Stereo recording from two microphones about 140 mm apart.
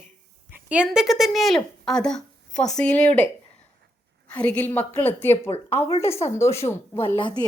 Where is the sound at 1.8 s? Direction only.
5° left (ahead or behind).